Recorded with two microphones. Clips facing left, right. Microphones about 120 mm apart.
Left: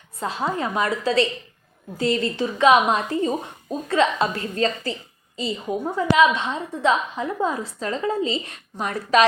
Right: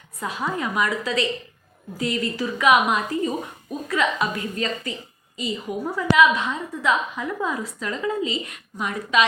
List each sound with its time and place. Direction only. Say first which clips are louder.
0.2 s a woman's voice: left 2 dB; 30° left (ahead or behind)